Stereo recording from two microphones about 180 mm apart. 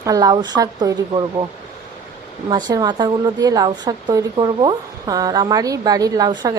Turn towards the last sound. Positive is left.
turn(degrees=-20)  # may be behind; listen again after turning